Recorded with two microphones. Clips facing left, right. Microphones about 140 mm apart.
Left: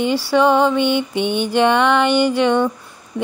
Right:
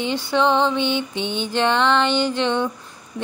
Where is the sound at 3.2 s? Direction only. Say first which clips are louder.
Left 6 dB; 70° left (ahead or behind).